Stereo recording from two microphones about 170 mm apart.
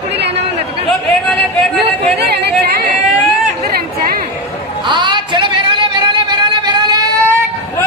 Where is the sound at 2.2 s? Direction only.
75° right (ahead or behind).